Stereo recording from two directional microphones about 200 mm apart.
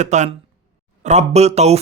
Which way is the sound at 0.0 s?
35° right (ahead or behind).